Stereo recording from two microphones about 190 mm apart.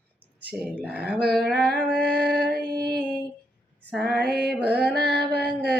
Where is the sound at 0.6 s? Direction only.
5° right (ahead or behind).